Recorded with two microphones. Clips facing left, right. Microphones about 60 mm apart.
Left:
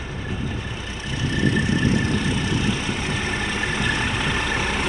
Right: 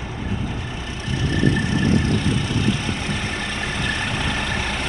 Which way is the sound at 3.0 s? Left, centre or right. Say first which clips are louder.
Left 1 dB; centre.